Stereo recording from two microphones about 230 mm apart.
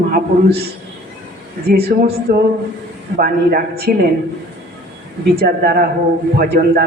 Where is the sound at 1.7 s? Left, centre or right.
Right.